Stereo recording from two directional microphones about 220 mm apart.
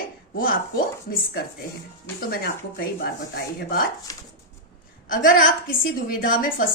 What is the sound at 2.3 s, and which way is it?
Speech, 45° left (ahead or behind).